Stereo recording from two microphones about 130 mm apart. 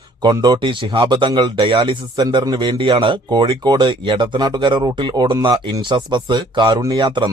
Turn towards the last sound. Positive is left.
turn(degrees=-35)  # may be behind; listen again after turning